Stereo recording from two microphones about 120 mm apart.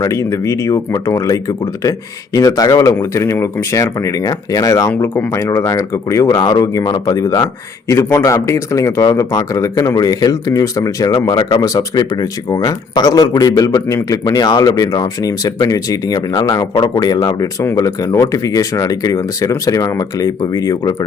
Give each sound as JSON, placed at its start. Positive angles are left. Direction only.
{"t": 0.0, "sound": "speech", "side_deg": 25}
{"t": 5.0, "sound": "speech", "side_deg": 15}